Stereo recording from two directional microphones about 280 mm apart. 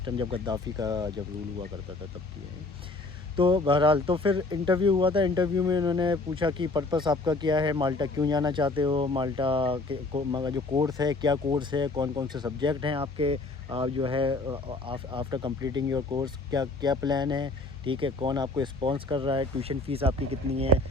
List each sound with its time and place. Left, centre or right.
0.0 s speech: centre
3.3 s speech: centre